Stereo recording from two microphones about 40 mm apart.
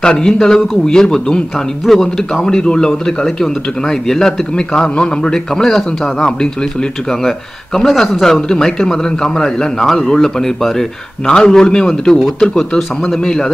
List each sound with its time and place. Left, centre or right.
0.0 s a man's voice: centre
1.9 s a man's voice: centre
2.3 s a man's voice: centre
12.7 s a man's voice: centre
13.2 s a man's voice: centre